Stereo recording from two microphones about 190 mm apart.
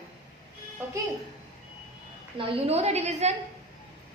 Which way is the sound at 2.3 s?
30° right (ahead or behind).